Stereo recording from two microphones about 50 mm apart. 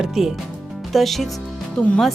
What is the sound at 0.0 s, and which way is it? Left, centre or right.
Speech, centre.